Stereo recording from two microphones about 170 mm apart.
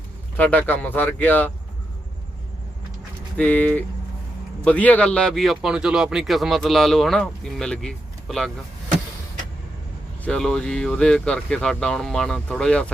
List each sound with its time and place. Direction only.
0.3 s speech: 10° left (ahead or behind)
3.3 s speech: 10° left (ahead or behind)
10.2 s speech: 5° left (ahead or behind)